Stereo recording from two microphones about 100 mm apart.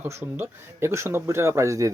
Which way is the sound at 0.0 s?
25° right (ahead or behind).